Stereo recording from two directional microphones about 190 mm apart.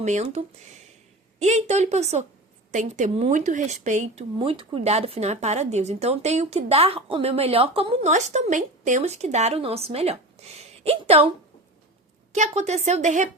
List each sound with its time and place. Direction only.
0.0 s speech: 35° right (ahead or behind)
12.3 s speech: 35° right (ahead or behind)